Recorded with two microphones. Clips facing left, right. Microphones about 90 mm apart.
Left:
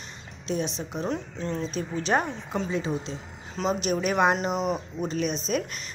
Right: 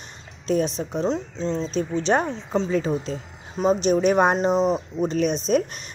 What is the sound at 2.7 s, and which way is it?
Speech, 45° right (ahead or behind).